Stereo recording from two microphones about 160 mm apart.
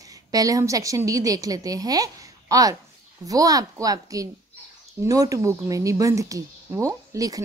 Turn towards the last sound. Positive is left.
turn(degrees=-20)  # may be behind; listen again after turning